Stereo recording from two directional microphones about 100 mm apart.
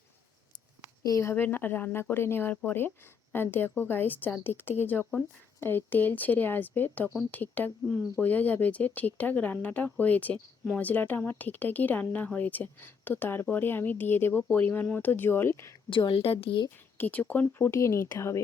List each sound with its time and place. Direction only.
1.0 s speech: 30° left (ahead or behind)
15.9 s a woman's voice: 55° left (ahead or behind)
17.0 s speech: 15° left (ahead or behind)